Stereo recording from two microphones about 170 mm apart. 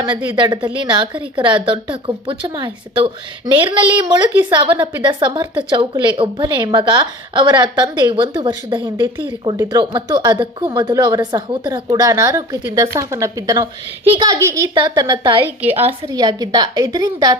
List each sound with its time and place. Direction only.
0.3 s speech: 25° right (ahead or behind)